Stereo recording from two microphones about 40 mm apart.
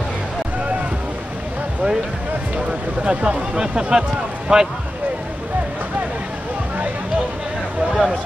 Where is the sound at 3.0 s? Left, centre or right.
Right.